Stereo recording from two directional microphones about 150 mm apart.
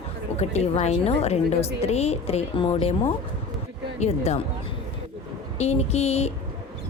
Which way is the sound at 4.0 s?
45° left (ahead or behind).